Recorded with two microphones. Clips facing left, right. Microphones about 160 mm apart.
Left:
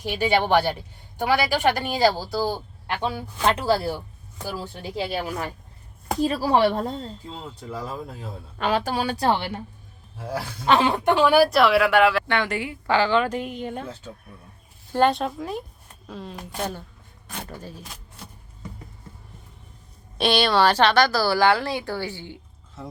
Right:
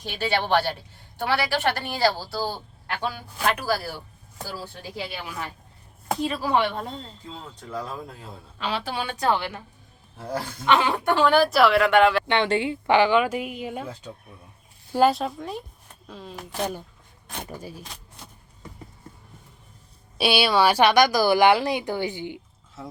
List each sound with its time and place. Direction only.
0.0 s speech: 15° left (ahead or behind)
4.9 s a woman's voice: 35° left (ahead or behind)
7.3 s speech: 5° left (ahead or behind)
8.5 s a woman's voice: 50° left (ahead or behind); by 9.6 s 30° left (ahead or behind)
10.7 s speech: 30° left (ahead or behind)
11.1 s speech: 10° left (ahead or behind)
11.4 s speech: centre (ahead or behind)
12.3 s speech: 25° right (ahead or behind); by 16.6 s centre (ahead or behind)
17.3 s speech: 10° right (ahead or behind)
20.1 s speech: 5° right (ahead or behind)